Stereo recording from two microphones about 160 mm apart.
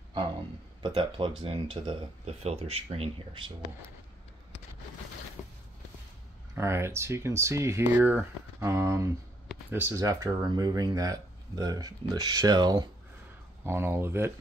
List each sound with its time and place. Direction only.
0.8 s speech: 35° right (ahead or behind)
5.4 s a sound: 10° left (ahead or behind)
6.5 s speech: 15° right (ahead or behind)